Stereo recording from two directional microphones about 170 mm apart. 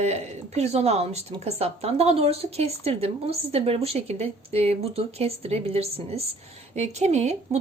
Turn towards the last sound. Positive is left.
turn(degrees=-40)  # may be behind; listen again after turning